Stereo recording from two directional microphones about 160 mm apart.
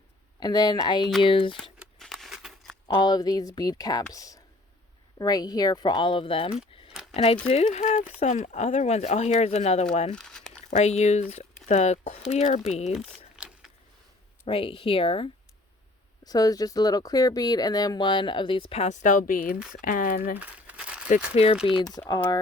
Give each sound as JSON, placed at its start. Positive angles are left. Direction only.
{"t": 0.3, "sound": "speech", "side_deg": 25}
{"t": 1.8, "sound": "scissors", "side_deg": 0}
{"t": 2.8, "sound": "speech", "side_deg": 25}
{"t": 10.2, "sound": "crumpling", "side_deg": 5}
{"t": 10.7, "sound": "speech", "side_deg": 45}
{"t": 13.3, "sound": "a sound", "side_deg": -5}
{"t": 14.4, "sound": "speech", "side_deg": 35}
{"t": 16.2, "sound": "speech", "side_deg": 25}
{"t": 20.4, "sound": "crumpling", "side_deg": -10}
{"t": 21.3, "sound": "speech", "side_deg": 40}
{"t": 21.9, "sound": "speech", "side_deg": 25}